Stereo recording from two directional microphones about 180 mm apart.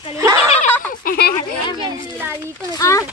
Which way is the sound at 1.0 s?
60° left (ahead or behind).